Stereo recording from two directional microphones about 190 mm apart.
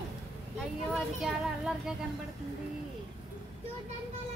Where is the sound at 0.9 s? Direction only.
Centre (ahead or behind).